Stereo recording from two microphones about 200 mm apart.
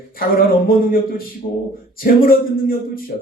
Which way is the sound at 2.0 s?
45° left (ahead or behind).